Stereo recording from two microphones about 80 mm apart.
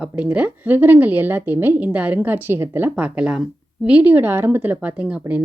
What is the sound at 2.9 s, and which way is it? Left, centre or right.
Speech, centre.